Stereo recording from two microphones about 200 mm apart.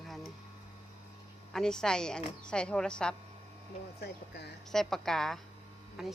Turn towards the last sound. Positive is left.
turn(degrees=0)  # may be behind; listen again after turning